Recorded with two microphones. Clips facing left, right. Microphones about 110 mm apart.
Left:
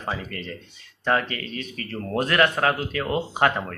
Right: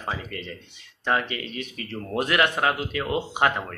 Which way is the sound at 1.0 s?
15° right (ahead or behind).